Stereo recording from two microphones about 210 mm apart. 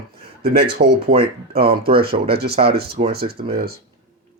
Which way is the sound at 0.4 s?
50° right (ahead or behind).